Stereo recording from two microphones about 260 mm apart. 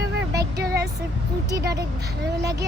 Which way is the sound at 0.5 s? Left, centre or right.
Right.